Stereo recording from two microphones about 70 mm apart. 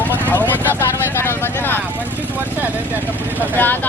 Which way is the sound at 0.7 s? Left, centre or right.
Left.